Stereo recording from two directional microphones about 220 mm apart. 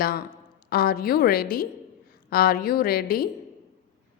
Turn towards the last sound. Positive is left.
turn(degrees=45)  # may be behind; listen again after turning